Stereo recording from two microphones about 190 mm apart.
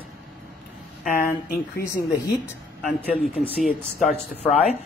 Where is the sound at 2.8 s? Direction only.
Centre (ahead or behind).